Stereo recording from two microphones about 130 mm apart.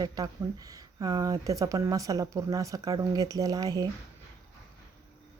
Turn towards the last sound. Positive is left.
turn(degrees=-30)  # may be behind; listen again after turning